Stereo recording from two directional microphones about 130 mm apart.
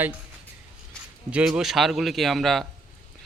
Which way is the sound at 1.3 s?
10° right (ahead or behind).